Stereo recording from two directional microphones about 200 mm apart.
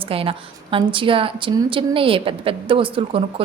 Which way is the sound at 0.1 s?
30° right (ahead or behind).